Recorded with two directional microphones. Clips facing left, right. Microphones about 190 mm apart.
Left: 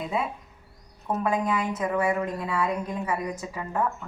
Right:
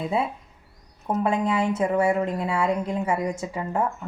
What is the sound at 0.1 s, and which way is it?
A woman's voice, 30° right (ahead or behind).